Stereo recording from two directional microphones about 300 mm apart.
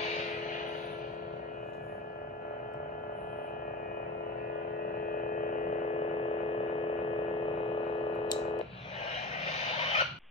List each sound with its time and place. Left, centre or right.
5.0 s hum: left
9.4 s vehicle: left